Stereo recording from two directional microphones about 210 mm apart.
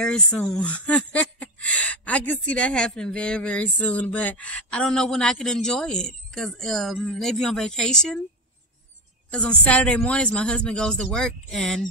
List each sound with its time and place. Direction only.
0.0 s speech: 5° left (ahead or behind)
9.3 s speech: 5° left (ahead or behind)